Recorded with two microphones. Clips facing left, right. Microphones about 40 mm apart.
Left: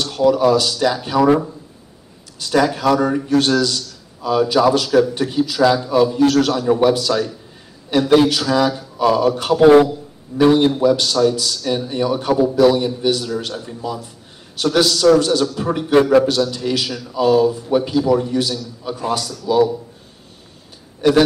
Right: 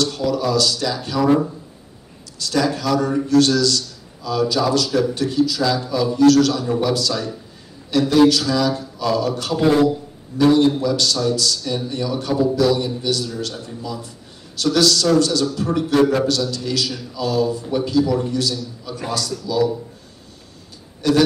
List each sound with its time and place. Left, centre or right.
0.0 s a man's voice: left
2.4 s a man's voice: left
21.0 s a man's voice: left